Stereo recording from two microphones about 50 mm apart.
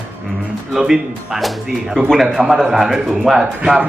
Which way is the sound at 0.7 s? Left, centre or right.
Centre.